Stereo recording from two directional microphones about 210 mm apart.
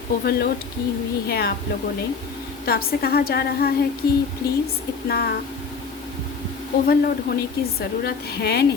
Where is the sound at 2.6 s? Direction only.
45° left (ahead or behind).